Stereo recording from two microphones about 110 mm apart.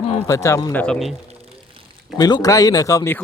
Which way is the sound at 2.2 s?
35° left (ahead or behind).